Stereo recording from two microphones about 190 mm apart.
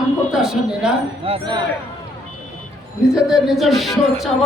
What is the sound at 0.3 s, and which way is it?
Speech, 5° right (ahead or behind).